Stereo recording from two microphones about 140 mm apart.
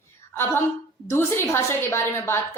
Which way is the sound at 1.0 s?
20° left (ahead or behind).